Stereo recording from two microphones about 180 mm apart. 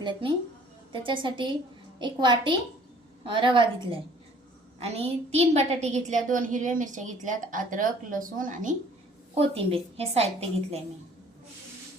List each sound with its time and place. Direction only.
0.0 s a woman's voice: 25° right (ahead or behind); by 8.7 s 50° right (ahead or behind)
9.3 s a woman's voice: 30° right (ahead or behind)